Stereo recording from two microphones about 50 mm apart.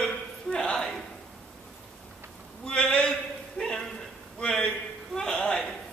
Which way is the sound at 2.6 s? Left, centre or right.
Centre.